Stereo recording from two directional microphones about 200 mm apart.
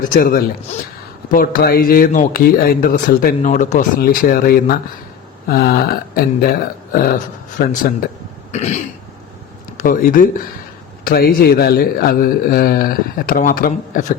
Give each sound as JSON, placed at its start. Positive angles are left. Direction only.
{"t": 0.1, "sound": "speech", "side_deg": 45}
{"t": 8.5, "sound": "throat clearing", "side_deg": 35}
{"t": 9.8, "sound": "speech", "side_deg": 45}